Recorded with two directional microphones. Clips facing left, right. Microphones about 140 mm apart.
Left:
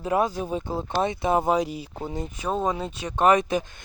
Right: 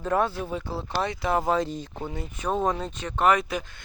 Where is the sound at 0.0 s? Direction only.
10° left (ahead or behind).